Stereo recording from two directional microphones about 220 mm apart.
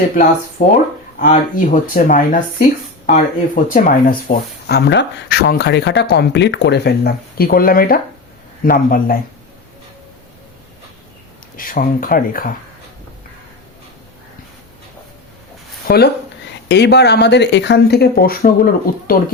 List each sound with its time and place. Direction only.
0.6 s speech: 35° left (ahead or behind)
11.5 s speech: 40° left (ahead or behind)
15.9 s speech: 45° left (ahead or behind)